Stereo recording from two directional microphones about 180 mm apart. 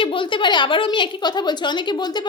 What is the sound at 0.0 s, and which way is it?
A woman's voice, 30° left (ahead or behind).